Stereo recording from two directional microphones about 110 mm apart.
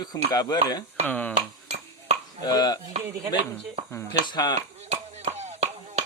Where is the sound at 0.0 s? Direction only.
35° left (ahead or behind).